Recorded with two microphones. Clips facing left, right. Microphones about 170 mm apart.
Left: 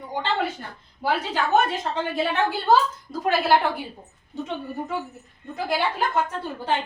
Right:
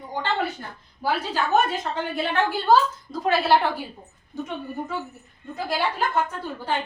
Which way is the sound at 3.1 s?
15° left (ahead or behind).